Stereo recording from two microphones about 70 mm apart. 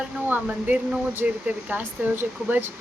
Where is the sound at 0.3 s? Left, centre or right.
Right.